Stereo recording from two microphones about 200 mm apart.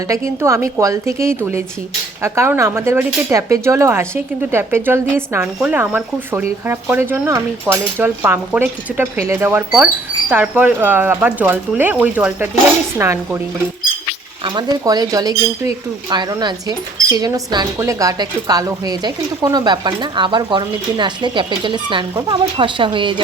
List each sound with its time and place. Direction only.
0.4 s speech: 15° right (ahead or behind)
14.4 s speech: 20° right (ahead or behind)